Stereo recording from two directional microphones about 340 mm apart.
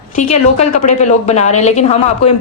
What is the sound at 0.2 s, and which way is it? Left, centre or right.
A woman's voice, left.